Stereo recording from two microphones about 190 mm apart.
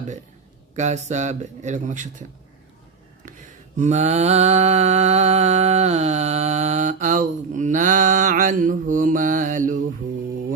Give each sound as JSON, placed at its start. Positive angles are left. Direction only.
{"t": 0.8, "sound": "speech", "side_deg": -35}
{"t": 3.2, "sound": "mantra", "side_deg": -40}